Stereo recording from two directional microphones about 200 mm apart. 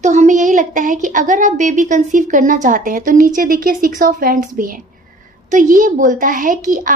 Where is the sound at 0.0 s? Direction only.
35° right (ahead or behind).